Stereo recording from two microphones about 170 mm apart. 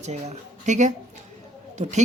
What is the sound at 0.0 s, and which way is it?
Speech, 40° right (ahead or behind).